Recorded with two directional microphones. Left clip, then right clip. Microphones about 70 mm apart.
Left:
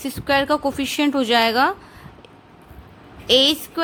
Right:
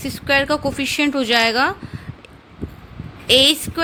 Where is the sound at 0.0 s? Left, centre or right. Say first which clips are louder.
Right 2 dB; left.